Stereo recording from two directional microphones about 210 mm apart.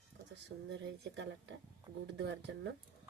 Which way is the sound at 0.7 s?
60° right (ahead or behind).